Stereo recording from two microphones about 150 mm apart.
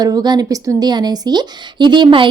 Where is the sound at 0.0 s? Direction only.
25° right (ahead or behind).